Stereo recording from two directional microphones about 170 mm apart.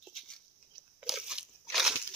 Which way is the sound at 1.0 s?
5° right (ahead or behind).